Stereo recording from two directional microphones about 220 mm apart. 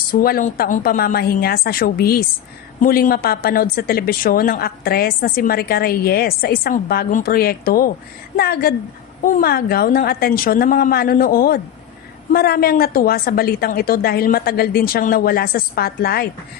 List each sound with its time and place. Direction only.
0.1 s speech: 40° left (ahead or behind)